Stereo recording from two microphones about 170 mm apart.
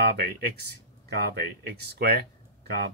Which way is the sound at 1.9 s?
70° right (ahead or behind).